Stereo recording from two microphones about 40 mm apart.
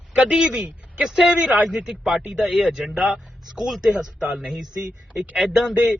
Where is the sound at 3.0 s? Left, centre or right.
Right.